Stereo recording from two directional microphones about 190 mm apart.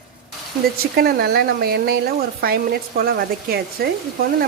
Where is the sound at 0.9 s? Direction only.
55° right (ahead or behind).